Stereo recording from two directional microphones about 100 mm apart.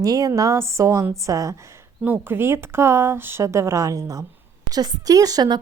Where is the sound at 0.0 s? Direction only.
35° right (ahead or behind).